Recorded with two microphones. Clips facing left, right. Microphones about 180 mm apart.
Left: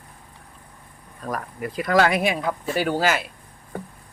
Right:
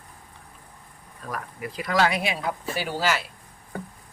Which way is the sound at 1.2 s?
45° left (ahead or behind).